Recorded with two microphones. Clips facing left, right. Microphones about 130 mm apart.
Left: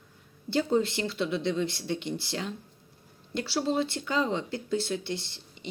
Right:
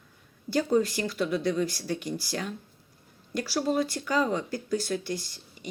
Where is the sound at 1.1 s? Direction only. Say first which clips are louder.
Right 2 dB; 25° left (ahead or behind).